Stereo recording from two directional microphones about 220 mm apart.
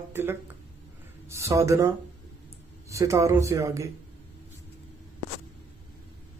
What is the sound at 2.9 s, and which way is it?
Speech, 15° right (ahead or behind).